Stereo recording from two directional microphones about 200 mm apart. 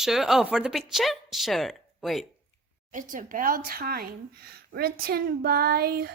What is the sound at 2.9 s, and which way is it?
Speech, 40° right (ahead or behind).